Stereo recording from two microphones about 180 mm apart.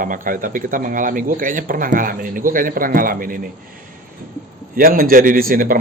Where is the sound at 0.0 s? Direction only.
50° right (ahead or behind).